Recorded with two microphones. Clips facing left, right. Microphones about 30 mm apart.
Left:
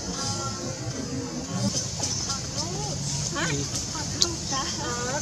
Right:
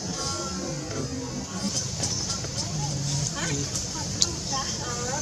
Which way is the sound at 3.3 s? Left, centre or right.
Centre.